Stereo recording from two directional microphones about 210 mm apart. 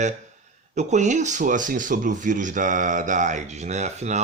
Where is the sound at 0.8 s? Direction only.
35° right (ahead or behind).